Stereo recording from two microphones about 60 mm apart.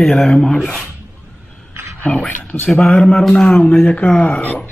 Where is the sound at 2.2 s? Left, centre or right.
Left.